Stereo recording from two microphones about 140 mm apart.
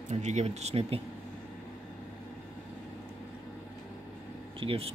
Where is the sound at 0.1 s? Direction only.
55° right (ahead or behind).